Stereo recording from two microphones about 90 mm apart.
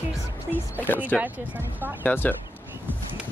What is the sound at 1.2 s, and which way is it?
Speech, 20° right (ahead or behind).